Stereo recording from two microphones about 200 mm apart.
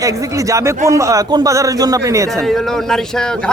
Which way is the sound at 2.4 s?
Centre (ahead or behind).